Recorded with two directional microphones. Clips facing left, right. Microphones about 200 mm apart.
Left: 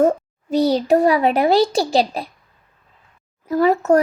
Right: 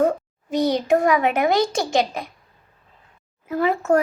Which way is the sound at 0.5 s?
35° left (ahead or behind).